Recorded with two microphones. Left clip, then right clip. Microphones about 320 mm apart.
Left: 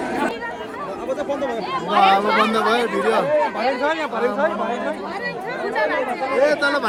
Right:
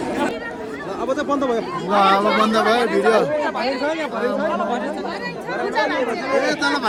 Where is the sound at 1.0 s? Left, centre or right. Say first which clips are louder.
Right 3 dB; centre.